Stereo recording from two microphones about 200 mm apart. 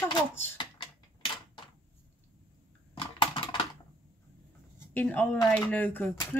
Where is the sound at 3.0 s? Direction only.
25° left (ahead or behind).